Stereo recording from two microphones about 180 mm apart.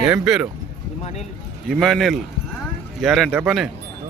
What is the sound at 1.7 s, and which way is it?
A man's voice, centre (ahead or behind).